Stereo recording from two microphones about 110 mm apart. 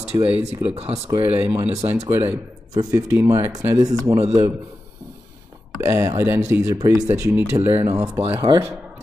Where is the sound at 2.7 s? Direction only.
30° right (ahead or behind).